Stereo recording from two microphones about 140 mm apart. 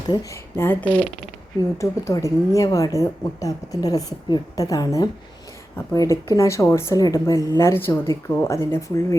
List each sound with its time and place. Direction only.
0.1 s speech: 25° left (ahead or behind)
7.3 s a woman's voice: 25° right (ahead or behind)
7.6 s speech: 15° left (ahead or behind)